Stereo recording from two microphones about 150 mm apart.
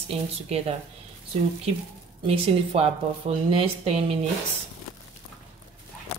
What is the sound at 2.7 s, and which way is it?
A woman's voice, 40° right (ahead or behind).